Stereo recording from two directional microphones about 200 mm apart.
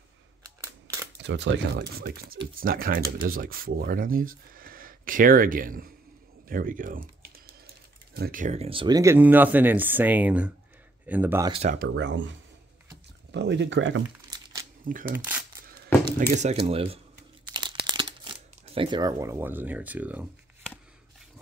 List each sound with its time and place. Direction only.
1.2 s speech: 60° right (ahead or behind); by 11.5 s 10° right (ahead or behind)
11.5 s speech: 40° right (ahead or behind)
11.9 s speech: 65° right (ahead or behind)
14.3 s crumpling: 20° right (ahead or behind)
14.9 s speech: 45° right (ahead or behind)
15.1 s speech: 10° right (ahead or behind)
16.2 s speech: 40° right (ahead or behind)
17.5 s crumpling: 20° right (ahead or behind)
17.9 s speech: 25° right (ahead or behind); by 20.2 s 10° right (ahead or behind)